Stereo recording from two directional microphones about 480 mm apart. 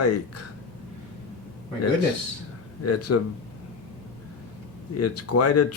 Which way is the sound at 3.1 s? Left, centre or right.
Left.